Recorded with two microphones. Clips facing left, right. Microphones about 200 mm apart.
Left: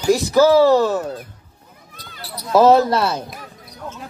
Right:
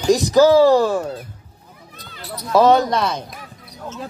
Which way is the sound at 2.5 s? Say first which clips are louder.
Left 2 dB; 5° left (ahead or behind).